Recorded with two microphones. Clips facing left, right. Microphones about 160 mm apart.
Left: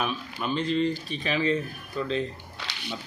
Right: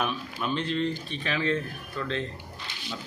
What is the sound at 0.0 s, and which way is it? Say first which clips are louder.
Speech: even; centre (ahead or behind).